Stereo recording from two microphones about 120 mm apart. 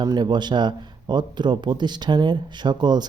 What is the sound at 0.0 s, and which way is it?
Speech, 40° right (ahead or behind).